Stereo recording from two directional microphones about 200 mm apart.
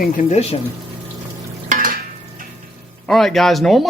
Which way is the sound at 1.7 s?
45° right (ahead or behind).